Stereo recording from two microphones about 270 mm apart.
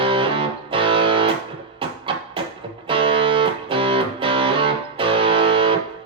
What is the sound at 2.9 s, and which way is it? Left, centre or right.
Music, centre.